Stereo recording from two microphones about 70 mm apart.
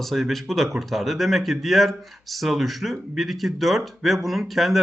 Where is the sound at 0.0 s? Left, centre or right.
Centre.